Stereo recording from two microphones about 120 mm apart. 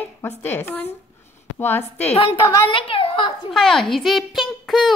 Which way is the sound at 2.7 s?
45° left (ahead or behind).